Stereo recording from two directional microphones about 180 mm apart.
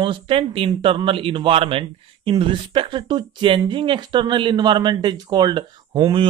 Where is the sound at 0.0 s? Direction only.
30° right (ahead or behind).